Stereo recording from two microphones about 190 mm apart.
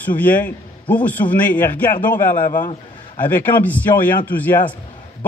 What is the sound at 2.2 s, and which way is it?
Speech, 45° left (ahead or behind).